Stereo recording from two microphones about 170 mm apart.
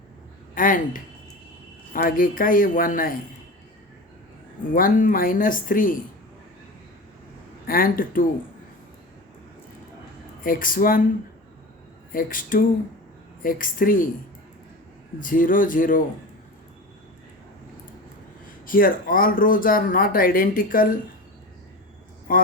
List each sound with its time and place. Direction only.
0.5 s speech: 50° left (ahead or behind)
4.7 s speech: 55° left (ahead or behind)
7.7 s speech: 60° left (ahead or behind)
10.4 s speech: 55° left (ahead or behind)
12.1 s speech: 55° left (ahead or behind)
15.2 s speech: 55° left (ahead or behind)
18.6 s speech: 55° left (ahead or behind)
22.3 s speech: 55° left (ahead or behind)